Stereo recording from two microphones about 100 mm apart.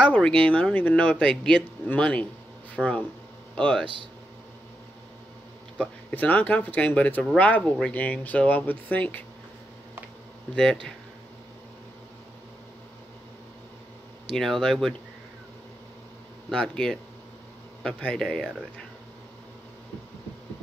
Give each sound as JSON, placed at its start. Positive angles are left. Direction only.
{"t": 0.0, "sound": "speech", "side_deg": 10}
{"t": 5.8, "sound": "speech", "side_deg": 15}
{"t": 10.5, "sound": "speech", "side_deg": 5}
{"t": 14.3, "sound": "speech", "side_deg": 5}
{"t": 16.4, "sound": "speech", "side_deg": 5}